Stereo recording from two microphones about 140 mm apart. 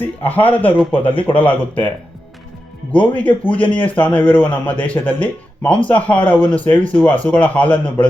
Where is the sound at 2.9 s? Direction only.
10° left (ahead or behind).